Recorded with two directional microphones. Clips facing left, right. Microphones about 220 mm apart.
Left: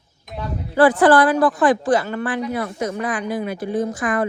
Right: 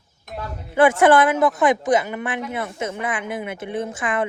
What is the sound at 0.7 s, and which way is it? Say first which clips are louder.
A woman's voice: left 1 dB; 25° right (ahead or behind).